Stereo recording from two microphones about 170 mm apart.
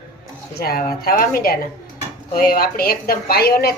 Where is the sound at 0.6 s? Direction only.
65° left (ahead or behind).